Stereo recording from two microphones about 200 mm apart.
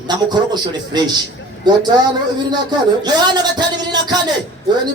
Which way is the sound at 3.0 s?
20° right (ahead or behind).